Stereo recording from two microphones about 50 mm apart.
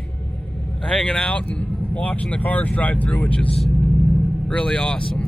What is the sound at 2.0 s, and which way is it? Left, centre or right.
Speech, left.